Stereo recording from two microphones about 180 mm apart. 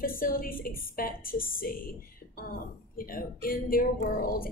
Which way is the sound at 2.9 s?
55° left (ahead or behind).